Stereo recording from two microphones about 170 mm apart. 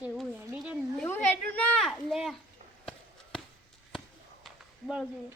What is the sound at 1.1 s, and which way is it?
Speech, 10° left (ahead or behind).